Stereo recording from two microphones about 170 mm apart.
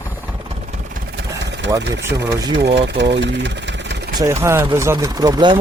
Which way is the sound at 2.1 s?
20° right (ahead or behind).